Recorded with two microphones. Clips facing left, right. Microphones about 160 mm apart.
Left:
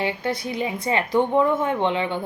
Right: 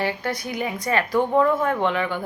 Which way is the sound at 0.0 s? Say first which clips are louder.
Left 1 dB; 25° left (ahead or behind).